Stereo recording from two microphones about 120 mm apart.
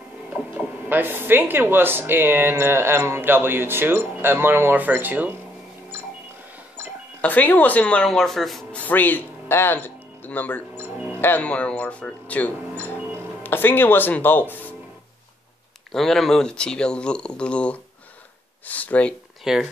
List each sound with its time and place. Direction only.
0.3 s speech: 15° right (ahead or behind)
7.2 s speech: 15° left (ahead or behind)
8.8 s speech: 15° left (ahead or behind)
10.8 s music: 15° right (ahead or behind)
11.1 s speech: 15° left (ahead or behind)
15.9 s speech: centre (ahead or behind)
19.4 s speech: 5° right (ahead or behind)